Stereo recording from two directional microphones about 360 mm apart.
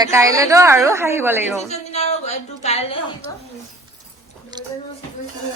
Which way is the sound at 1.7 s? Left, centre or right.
Centre.